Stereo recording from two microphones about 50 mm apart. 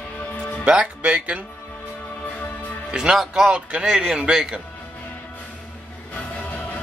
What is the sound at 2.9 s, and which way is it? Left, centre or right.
Speech, centre.